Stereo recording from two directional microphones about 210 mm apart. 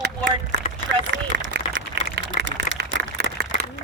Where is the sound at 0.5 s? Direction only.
55° right (ahead or behind).